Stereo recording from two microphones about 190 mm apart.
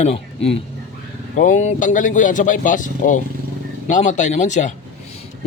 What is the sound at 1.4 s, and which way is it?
A man's voice, 40° left (ahead or behind).